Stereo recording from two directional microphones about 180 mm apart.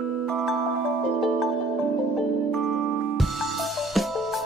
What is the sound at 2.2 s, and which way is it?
Music, centre (ahead or behind).